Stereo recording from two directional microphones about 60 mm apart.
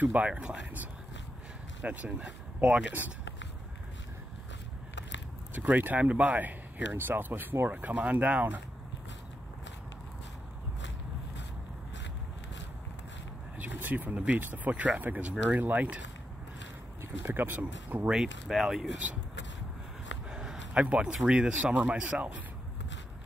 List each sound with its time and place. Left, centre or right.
0.0 s speech: right
1.8 s speech: right
2.2 s speech: centre
5.5 s speech: right
13.6 s a sound: right
14.4 s speech: right
17.0 s speech: right
18.0 s speech: centre
20.2 s a sound: centre
20.7 s speech: right